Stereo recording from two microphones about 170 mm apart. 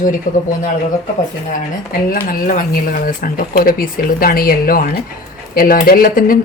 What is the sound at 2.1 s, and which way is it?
Speech, 55° left (ahead or behind).